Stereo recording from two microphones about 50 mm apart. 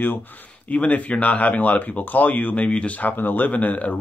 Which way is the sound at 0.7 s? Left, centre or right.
Left.